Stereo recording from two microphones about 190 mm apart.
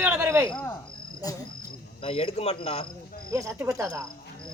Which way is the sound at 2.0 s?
30° left (ahead or behind).